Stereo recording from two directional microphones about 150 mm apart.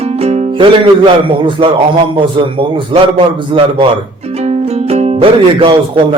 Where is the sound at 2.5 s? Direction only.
35° right (ahead or behind).